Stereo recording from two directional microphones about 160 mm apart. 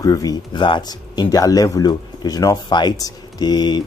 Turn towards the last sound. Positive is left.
turn(degrees=25)  # may be behind; listen again after turning